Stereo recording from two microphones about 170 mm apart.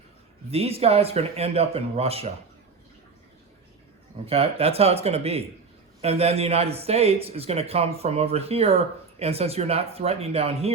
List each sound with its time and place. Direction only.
0.5 s speech: 35° right (ahead or behind)
4.3 s speech: 35° right (ahead or behind)